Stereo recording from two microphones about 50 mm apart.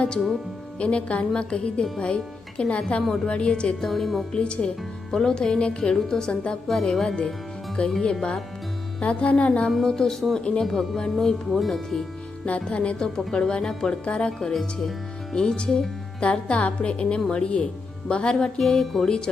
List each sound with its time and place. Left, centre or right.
0.8 s speech: left
3.8 s a woman's voice: centre
4.3 s a woman's voice: centre
6.7 s a woman's voice: centre
7.8 s speech: left
9.0 s speech: left
9.8 s a woman's voice: centre
10.4 s a woman's voice: centre
12.5 s a woman's voice: left
14.3 s a woman's voice: centre
18.6 s a woman's voice: centre